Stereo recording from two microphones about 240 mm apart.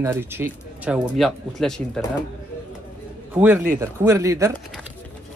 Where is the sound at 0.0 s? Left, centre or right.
Centre.